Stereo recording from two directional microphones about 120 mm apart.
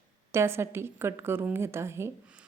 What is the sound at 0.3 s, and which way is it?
A woman's voice, 20° right (ahead or behind).